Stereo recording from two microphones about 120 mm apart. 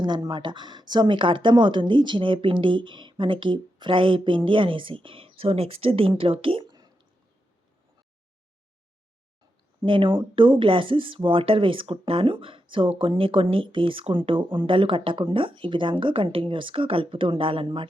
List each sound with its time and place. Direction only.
0.3 s speech: 40° right (ahead or behind)
9.8 s speech: 45° right (ahead or behind)